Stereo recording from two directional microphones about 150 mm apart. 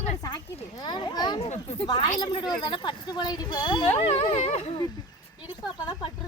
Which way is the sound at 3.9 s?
45° left (ahead or behind).